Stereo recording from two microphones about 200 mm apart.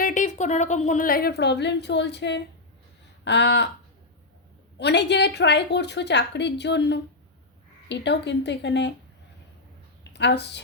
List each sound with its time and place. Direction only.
0.0 s a woman's voice: 40° left (ahead or behind); by 3.7 s 60° left (ahead or behind)
4.8 s a woman's voice: 55° left (ahead or behind)
10.0 s a woman's voice: 60° left (ahead or behind)